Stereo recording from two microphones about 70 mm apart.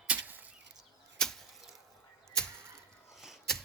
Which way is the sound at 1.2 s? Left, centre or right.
Centre.